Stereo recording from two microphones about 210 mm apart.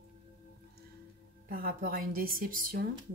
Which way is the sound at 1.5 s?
45° right (ahead or behind).